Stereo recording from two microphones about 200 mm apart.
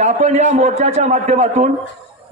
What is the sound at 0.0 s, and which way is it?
A man's voice, 35° right (ahead or behind).